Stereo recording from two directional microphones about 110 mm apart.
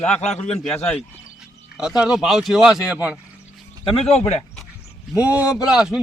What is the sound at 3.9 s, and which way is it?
Speech, 70° left (ahead or behind).